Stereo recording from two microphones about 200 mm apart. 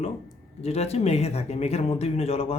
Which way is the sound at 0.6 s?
30° left (ahead or behind).